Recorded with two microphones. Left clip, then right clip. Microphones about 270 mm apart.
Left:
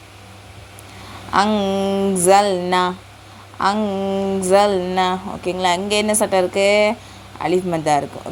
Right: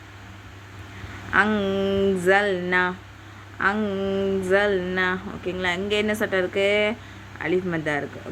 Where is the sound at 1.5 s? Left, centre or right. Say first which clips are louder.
Left 4 dB; centre.